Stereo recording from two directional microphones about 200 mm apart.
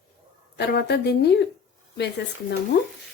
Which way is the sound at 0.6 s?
55° left (ahead or behind).